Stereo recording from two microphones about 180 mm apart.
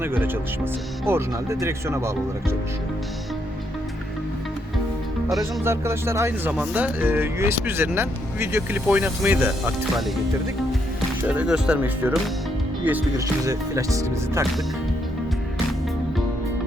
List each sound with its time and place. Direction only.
0.2 s speech: 10° right (ahead or behind)
5.4 s speech: 15° right (ahead or behind)
11.2 s speech: 5° right (ahead or behind)